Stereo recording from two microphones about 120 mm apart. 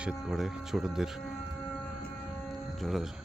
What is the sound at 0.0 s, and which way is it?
Speech, 5° right (ahead or behind).